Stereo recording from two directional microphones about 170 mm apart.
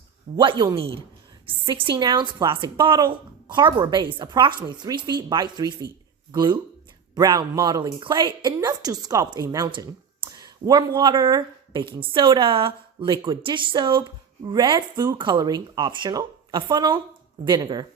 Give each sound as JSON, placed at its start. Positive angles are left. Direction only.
{"t": 0.3, "sound": "a woman's voice", "side_deg": -25}